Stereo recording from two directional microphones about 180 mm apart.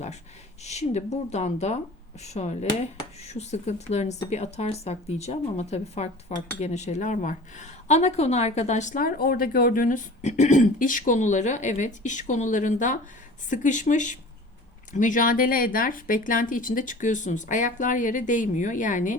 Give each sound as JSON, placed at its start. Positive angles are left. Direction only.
{"t": 0.6, "sound": "speech", "side_deg": 40}